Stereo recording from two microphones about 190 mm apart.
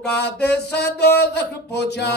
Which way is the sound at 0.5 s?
60° left (ahead or behind).